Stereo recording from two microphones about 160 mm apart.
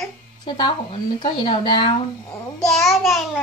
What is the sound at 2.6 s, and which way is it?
Speech, centre (ahead or behind).